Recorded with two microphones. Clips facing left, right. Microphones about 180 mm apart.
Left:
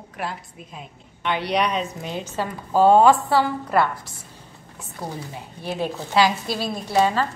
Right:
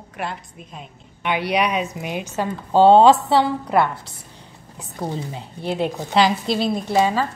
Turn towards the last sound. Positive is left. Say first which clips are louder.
# right 1 dB
turn(degrees=-10)  # may be behind; listen again after turning